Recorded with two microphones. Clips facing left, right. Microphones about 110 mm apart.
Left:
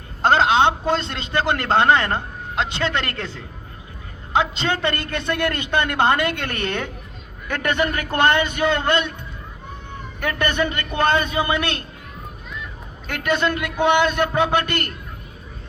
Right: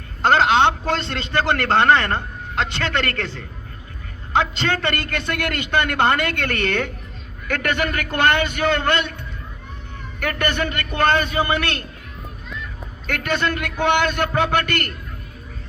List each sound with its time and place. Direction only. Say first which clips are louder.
0.2 s a man's voice: even; 20° left (ahead or behind)
8.1 s a man's voice: even; 20° left (ahead or behind)
10.2 s a man's voice: left 1 dB; 20° left (ahead or behind)
13.1 s a man's voice: left 1 dB; 20° left (ahead or behind)